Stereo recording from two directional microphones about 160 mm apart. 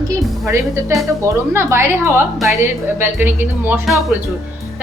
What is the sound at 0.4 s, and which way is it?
Speech, 15° right (ahead or behind).